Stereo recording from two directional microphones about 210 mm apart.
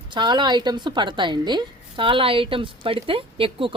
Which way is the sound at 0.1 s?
20° right (ahead or behind).